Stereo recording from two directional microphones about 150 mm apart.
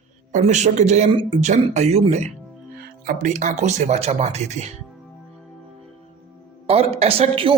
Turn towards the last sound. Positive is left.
turn(degrees=-40)  # may be behind; listen again after turning